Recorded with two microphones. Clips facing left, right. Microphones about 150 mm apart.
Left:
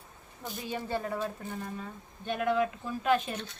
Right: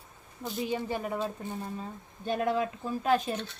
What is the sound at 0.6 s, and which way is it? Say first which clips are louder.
Speech: right 2 dB; 15° right (ahead or behind).